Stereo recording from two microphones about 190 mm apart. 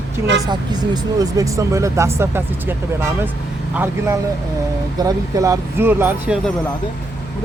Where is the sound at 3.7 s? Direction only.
10° right (ahead or behind).